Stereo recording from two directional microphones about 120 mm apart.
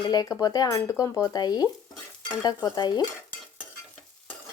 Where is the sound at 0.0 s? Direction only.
35° left (ahead or behind).